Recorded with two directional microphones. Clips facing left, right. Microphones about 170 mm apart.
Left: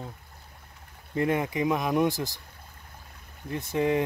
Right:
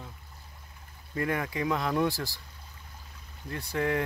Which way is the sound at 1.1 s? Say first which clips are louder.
Left 4 dB; 20° left (ahead or behind).